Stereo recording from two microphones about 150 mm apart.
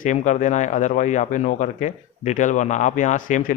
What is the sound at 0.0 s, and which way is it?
A man's voice, 55° left (ahead or behind).